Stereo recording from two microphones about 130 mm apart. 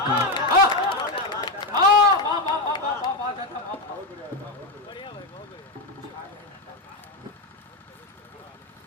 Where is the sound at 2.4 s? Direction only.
35° left (ahead or behind).